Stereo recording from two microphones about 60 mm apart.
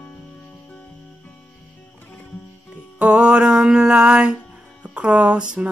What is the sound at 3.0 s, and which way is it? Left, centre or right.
Music, centre.